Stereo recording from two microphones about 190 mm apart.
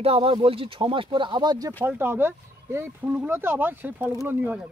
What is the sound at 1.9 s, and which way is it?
Speech, 10° right (ahead or behind).